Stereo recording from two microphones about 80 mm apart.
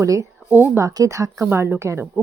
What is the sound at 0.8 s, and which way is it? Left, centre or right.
Speech, right.